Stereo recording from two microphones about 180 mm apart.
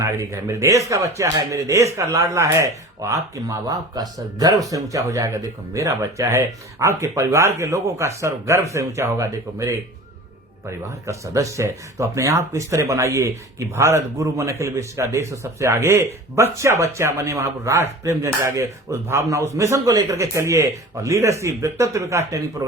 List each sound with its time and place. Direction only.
0.0 s a man's voice: 15° right (ahead or behind)
11.0 s a man's voice: 15° right (ahead or behind)